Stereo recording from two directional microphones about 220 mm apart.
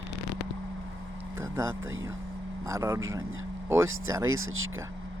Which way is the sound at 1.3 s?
10° right (ahead or behind).